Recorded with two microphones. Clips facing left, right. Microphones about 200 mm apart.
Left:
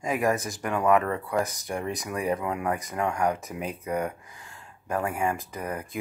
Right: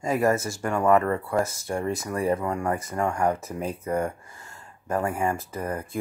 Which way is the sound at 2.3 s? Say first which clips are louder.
Right 2 dB; 5° left (ahead or behind).